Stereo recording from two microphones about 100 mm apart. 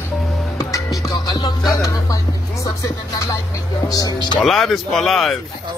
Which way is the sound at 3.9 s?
40° left (ahead or behind).